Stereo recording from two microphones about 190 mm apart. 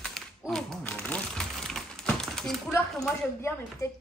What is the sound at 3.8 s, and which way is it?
Speech, 20° left (ahead or behind).